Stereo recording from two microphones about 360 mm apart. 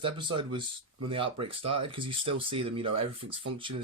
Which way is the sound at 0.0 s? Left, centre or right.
Centre.